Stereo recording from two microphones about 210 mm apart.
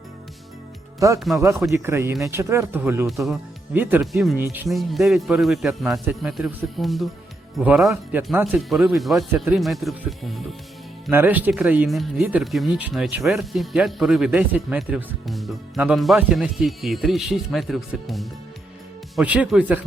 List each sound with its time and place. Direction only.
0.9 s speech: 15° right (ahead or behind)
3.1 s speech: centre (ahead or behind)
4.4 s speech: 15° right (ahead or behind)
4.7 s speech: centre (ahead or behind)